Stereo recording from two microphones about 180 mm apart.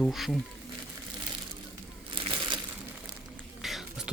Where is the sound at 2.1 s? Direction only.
30° right (ahead or behind).